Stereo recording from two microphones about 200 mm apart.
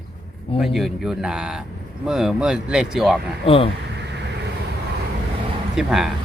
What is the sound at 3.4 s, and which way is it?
Speech, 25° left (ahead or behind).